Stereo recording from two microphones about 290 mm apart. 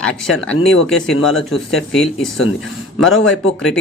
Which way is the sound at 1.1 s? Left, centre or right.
Left.